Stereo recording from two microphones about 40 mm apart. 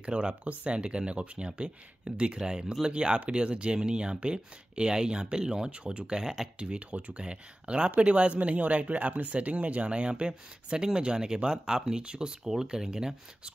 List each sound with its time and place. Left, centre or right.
0.0 s speech: right
6.6 s speech: right